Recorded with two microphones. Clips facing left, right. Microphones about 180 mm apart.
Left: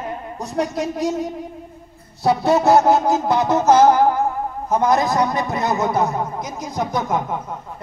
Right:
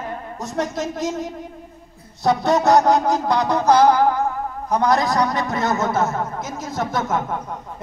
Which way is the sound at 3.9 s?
20° left (ahead or behind).